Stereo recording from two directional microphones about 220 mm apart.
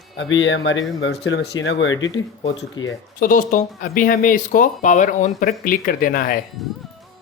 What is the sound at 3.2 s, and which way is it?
Speech, 35° left (ahead or behind).